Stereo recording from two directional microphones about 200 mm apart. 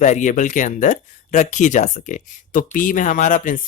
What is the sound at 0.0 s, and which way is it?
Speech, 40° left (ahead or behind).